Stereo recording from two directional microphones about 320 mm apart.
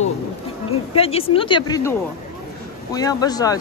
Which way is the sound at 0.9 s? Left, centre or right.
Centre.